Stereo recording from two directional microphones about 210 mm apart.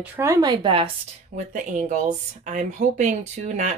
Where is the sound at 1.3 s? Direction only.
35° right (ahead or behind).